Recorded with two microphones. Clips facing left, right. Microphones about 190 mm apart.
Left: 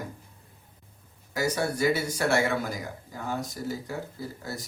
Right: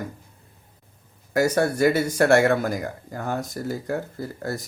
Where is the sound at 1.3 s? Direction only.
55° right (ahead or behind).